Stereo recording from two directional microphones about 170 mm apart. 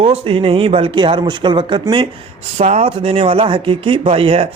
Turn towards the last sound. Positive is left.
turn(degrees=-30)  # may be behind; listen again after turning